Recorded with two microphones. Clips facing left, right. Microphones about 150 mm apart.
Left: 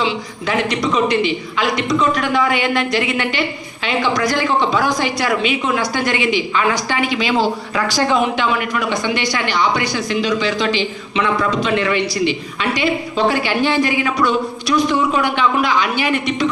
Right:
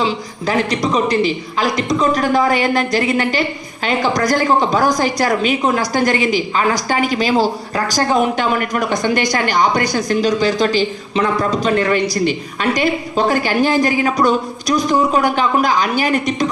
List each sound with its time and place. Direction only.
0.0 s speech: 40° right (ahead or behind)